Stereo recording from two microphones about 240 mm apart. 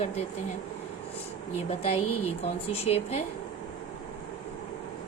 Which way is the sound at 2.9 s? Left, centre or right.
Left.